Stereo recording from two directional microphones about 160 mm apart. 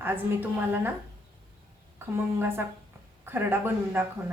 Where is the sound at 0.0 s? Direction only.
15° right (ahead or behind).